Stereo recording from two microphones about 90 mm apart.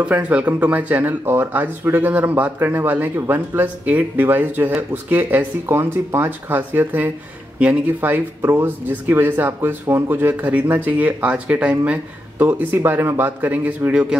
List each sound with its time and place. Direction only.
0.0 s speech: 15° right (ahead or behind)